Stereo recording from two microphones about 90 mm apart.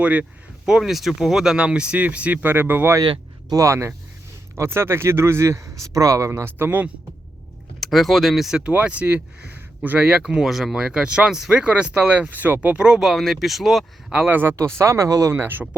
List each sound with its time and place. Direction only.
0.0 s speech: 15° right (ahead or behind)
7.8 s speech: centre (ahead or behind)
14.1 s speech: 15° right (ahead or behind)
14.6 s speech: 35° right (ahead or behind)
15.4 s speech: 20° right (ahead or behind)